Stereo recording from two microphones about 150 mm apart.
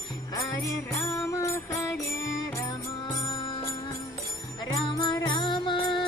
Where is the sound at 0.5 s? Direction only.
20° left (ahead or behind).